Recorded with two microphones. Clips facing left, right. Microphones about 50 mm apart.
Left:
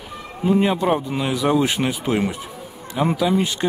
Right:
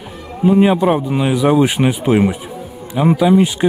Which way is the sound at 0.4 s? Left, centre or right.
Centre.